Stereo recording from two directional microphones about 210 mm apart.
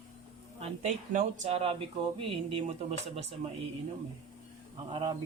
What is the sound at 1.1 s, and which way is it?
Speech, 35° right (ahead or behind).